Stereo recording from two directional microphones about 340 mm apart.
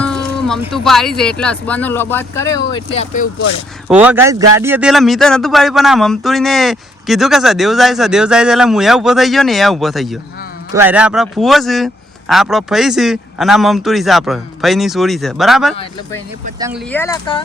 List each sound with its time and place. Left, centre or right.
0.0 s a man's voice: centre; by 3.5 s left
3.8 s a man's voice: centre
15.7 s speech: centre
16.6 s speech: centre
16.9 s speech: centre